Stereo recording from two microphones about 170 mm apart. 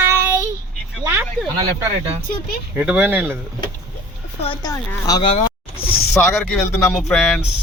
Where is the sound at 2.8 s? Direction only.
10° right (ahead or behind).